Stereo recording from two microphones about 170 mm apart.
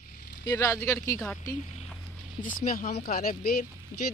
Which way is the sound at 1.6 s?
45° left (ahead or behind).